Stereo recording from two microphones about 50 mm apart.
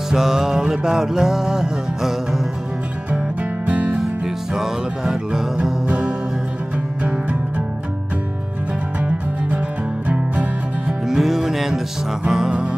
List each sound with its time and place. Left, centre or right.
0.1 s music: centre
3.6 s music: right
4.6 s music: centre
7.0 s music: right
10.0 s music: right
10.9 s music: centre